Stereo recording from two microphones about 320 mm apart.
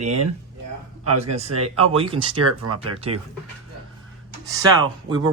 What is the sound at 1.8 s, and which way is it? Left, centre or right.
Speech, centre.